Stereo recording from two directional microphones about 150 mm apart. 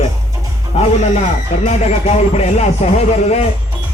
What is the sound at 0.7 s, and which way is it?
Speech, 45° left (ahead or behind).